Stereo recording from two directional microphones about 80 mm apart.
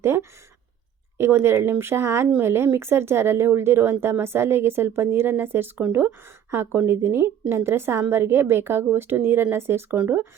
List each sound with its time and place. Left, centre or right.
0.0 s a woman's voice: right